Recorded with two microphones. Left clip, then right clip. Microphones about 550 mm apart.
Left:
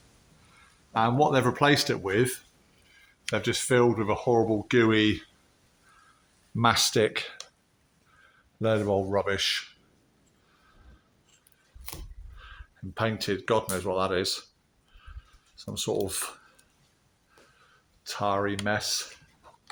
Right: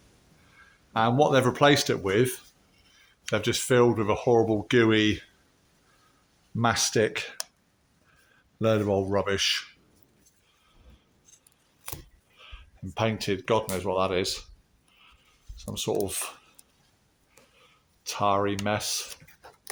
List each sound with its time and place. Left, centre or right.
0.9 s speech: right
6.6 s speech: right
8.6 s speech: right
12.4 s speech: right
15.5 s speech: right
18.0 s speech: right